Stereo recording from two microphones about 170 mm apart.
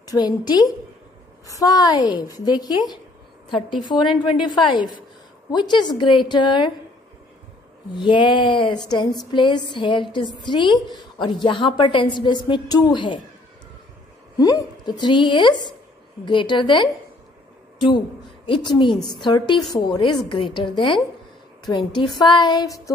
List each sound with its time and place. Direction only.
0.0 s a woman's voice: 25° left (ahead or behind)
3.4 s a woman's voice: centre (ahead or behind)
4.3 s a woman's voice: 30° left (ahead or behind)
7.9 s a woman's voice: 30° left (ahead or behind)
14.4 s a woman's voice: 25° left (ahead or behind)